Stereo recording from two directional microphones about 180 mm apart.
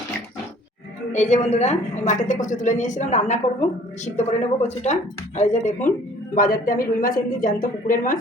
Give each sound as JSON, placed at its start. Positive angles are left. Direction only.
{"t": 1.1, "sound": "a woman's voice", "side_deg": 40}